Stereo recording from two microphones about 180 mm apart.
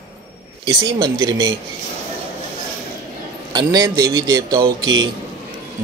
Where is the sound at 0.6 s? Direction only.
20° right (ahead or behind).